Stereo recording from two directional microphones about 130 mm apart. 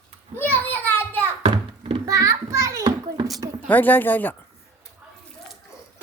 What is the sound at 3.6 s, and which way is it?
Speech, 15° left (ahead or behind).